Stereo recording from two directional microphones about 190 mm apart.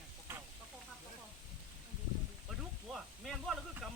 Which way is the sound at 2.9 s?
Centre (ahead or behind).